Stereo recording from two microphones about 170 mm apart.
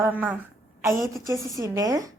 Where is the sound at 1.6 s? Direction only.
20° right (ahead or behind).